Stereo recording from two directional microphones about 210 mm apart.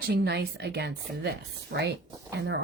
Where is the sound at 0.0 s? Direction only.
50° right (ahead or behind).